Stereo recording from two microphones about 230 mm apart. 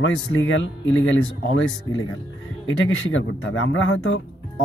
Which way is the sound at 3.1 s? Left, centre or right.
Left.